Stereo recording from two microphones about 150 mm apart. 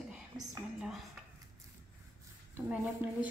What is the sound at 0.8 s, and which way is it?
Speech, centre (ahead or behind).